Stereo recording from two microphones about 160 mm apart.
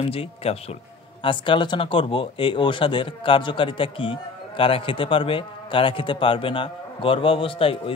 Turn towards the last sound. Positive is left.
turn(degrees=35)  # may be behind; listen again after turning